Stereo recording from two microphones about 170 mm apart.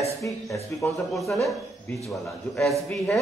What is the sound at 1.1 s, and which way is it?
Speech, centre (ahead or behind).